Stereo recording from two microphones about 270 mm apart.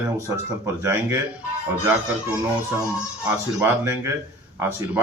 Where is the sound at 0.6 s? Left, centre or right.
Centre.